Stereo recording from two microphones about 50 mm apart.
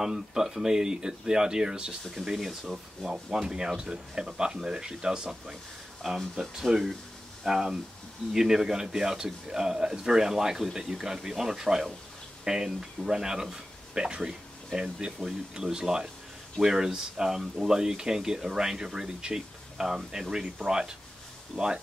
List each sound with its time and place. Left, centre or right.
0.0 s speech: centre
2.3 s speech: centre
21.5 s speech: centre